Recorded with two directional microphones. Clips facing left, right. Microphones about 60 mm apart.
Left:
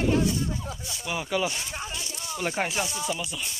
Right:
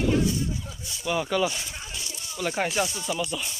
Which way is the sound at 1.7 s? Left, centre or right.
Left.